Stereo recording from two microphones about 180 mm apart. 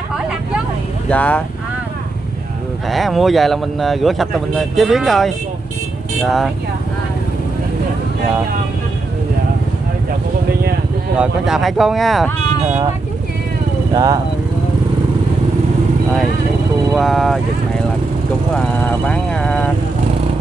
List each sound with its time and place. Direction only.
1.0 s speech: 5° left (ahead or behind)
2.9 s speech: centre (ahead or behind)
11.1 s speech: 5° right (ahead or behind)
13.9 s speech: 20° right (ahead or behind)
16.9 s speech: centre (ahead or behind)
18.9 s speech: 5° left (ahead or behind)